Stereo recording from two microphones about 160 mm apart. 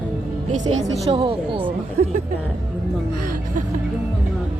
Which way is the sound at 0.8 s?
35° right (ahead or behind).